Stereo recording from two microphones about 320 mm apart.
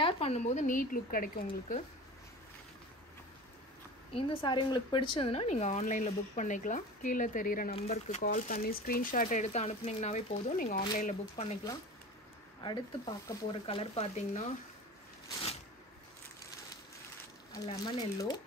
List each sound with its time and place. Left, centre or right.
0.0 s speech: centre
4.1 s speech: centre
13.3 s speech: centre
17.5 s speech: centre